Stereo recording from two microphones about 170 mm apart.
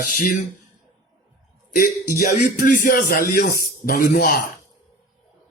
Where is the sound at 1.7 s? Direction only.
55° left (ahead or behind).